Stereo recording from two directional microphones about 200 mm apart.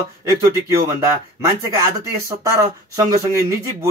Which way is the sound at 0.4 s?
15° right (ahead or behind).